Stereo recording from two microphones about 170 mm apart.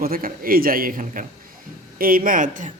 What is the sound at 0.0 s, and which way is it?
A man's voice, 60° right (ahead or behind).